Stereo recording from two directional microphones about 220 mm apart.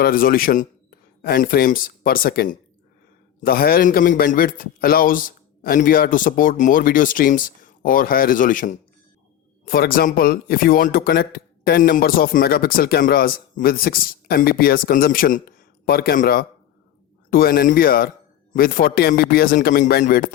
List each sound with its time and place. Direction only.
0.0 s a man's voice: 40° left (ahead or behind)